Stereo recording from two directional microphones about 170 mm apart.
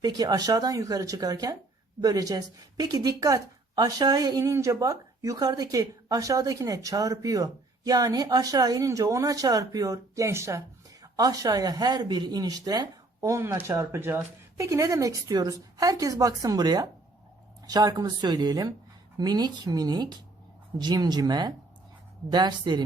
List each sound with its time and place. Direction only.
0.0 s a woman's voice: 25° right (ahead or behind)